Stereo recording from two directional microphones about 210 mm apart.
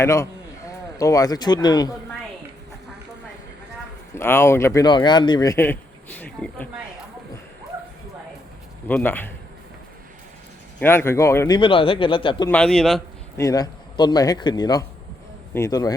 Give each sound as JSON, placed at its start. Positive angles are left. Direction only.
{"t": 0.0, "sound": "speech", "side_deg": 15}
{"t": 4.1, "sound": "speech", "side_deg": 10}
{"t": 8.9, "sound": "speech", "side_deg": 10}
{"t": 10.8, "sound": "a man's voice", "side_deg": 10}
{"t": 12.5, "sound": "speech", "side_deg": 5}
{"t": 13.3, "sound": "a man's voice", "side_deg": 15}